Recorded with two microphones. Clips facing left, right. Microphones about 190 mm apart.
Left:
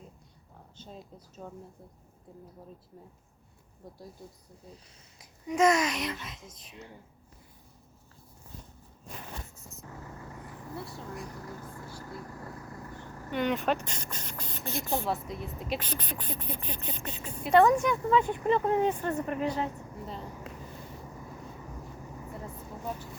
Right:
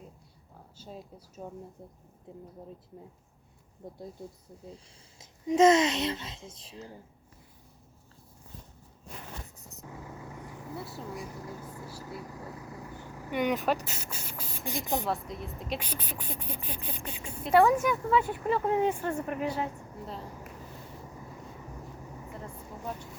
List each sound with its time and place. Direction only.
0.8 s a sound: 10° right (ahead or behind)
1.4 s a child's voice: 15° right (ahead or behind)
3.8 s a child's voice: 25° right (ahead or behind)
5.2 s a child's voice: 25° right (ahead or behind)
10.0 s vehicle: 5° right (ahead or behind)
13.8 s beatboxing: 5° right (ahead or behind)
15.0 s a woman's voice: centre (ahead or behind)
15.8 s speech: 10° right (ahead or behind)
22.3 s vehicle: 5° left (ahead or behind)